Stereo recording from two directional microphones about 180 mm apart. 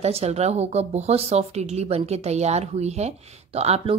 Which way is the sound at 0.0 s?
35° right (ahead or behind).